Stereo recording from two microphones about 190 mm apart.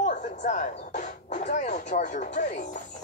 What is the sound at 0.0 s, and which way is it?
Speech, 40° left (ahead or behind).